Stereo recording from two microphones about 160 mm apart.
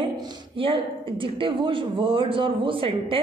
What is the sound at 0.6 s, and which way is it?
Speech, 35° right (ahead or behind).